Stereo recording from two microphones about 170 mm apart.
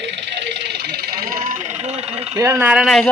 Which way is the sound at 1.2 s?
50° right (ahead or behind).